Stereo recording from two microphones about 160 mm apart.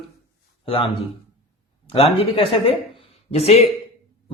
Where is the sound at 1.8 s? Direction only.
35° left (ahead or behind).